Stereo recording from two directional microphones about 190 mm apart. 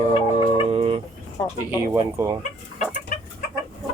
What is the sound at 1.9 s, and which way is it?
Speech, 20° right (ahead or behind).